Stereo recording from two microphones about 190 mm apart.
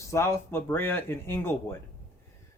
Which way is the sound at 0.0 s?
15° left (ahead or behind).